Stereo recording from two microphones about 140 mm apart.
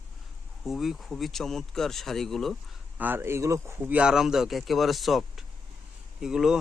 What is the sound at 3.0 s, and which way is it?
Speech, 15° right (ahead or behind).